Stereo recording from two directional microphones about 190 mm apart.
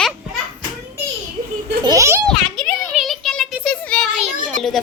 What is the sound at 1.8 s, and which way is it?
Speech, 15° right (ahead or behind).